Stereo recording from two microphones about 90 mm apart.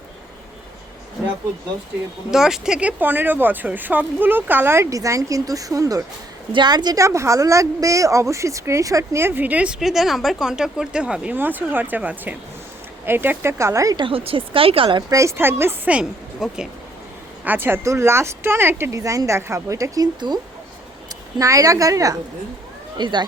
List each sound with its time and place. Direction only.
2.3 s speech: 5° right (ahead or behind)
3.0 s speech: 20° right (ahead or behind); by 6.1 s 40° right (ahead or behind)
6.5 s a woman's voice: 55° right (ahead or behind)
7.0 s speech: 35° right (ahead or behind); by 9.7 s 15° right (ahead or behind)
9.8 s speech: 5° right (ahead or behind); by 13.9 s 35° right (ahead or behind)
13.9 s speech: 80° right
15.1 s speech: 35° right (ahead or behind)
15.9 s speech: 10° right (ahead or behind)
17.4 s speech: 20° right (ahead or behind); by 20.1 s 35° right (ahead or behind)
20.1 s speech: 55° right (ahead or behind)
21.3 s speech: 40° right (ahead or behind)
23.0 s speech: 60° right (ahead or behind)